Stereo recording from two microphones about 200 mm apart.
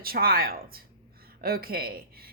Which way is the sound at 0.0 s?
50° right (ahead or behind).